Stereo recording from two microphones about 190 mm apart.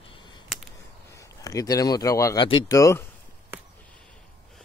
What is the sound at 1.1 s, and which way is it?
Speech, 15° left (ahead or behind).